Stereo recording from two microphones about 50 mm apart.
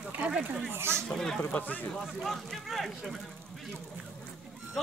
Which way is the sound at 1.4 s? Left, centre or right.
Left.